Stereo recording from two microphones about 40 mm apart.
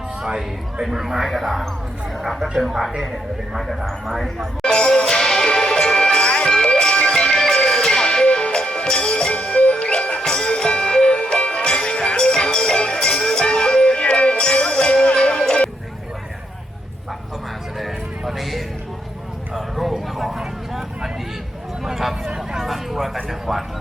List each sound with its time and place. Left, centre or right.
0.2 s a man's voice: centre
3.6 s speech: centre
4.6 s music: left
10.2 s music: centre
17.7 s music: centre
19.5 s a sound: centre
20.4 s vehicle: centre
21.8 s a man's voice: centre